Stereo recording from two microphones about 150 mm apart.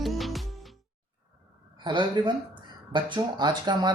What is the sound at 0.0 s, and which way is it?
Music, centre (ahead or behind).